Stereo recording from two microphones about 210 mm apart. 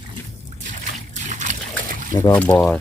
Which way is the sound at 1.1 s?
35° right (ahead or behind).